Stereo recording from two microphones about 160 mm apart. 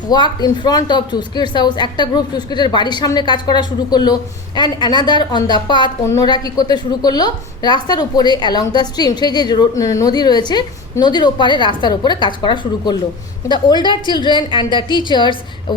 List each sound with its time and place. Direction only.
0.1 s a woman's voice: 25° left (ahead or behind)